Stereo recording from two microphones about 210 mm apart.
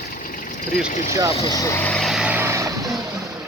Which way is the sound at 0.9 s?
40° left (ahead or behind).